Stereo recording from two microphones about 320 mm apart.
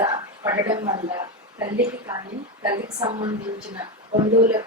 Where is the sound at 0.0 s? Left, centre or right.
Centre.